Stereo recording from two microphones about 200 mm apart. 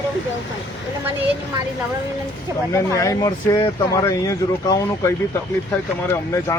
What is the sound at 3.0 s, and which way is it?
Speech, 15° left (ahead or behind).